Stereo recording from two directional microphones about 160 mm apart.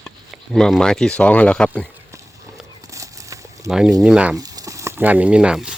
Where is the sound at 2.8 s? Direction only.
20° right (ahead or behind).